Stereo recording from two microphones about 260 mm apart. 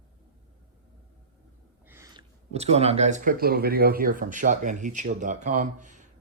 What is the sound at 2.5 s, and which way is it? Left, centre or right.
Speech, right.